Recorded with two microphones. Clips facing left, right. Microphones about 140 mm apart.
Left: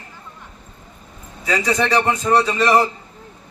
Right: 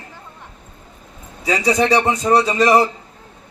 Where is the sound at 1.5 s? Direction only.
35° right (ahead or behind).